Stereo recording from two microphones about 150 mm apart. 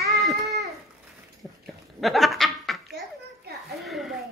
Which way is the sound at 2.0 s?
Centre (ahead or behind).